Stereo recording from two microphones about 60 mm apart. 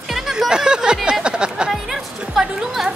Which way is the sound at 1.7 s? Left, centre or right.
Centre.